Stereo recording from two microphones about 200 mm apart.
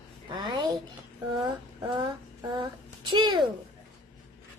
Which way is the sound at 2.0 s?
20° right (ahead or behind).